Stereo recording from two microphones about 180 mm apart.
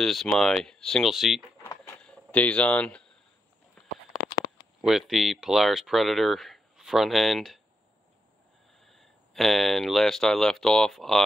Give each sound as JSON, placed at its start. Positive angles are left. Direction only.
{"t": 0.0, "sound": "speech", "side_deg": 0}
{"t": 4.1, "sound": "a sound", "side_deg": 50}
{"t": 4.8, "sound": "speech", "side_deg": 0}
{"t": 8.8, "sound": "speech", "side_deg": 0}